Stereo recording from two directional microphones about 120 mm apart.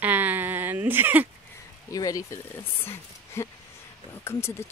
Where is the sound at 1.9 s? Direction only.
30° left (ahead or behind).